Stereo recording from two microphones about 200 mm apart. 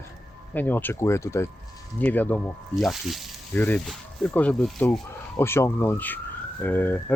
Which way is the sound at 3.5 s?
10° left (ahead or behind).